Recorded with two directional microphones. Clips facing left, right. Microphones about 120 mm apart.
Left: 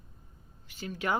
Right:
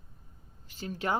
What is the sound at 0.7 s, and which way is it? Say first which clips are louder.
Speech: even; 35° right (ahead or behind).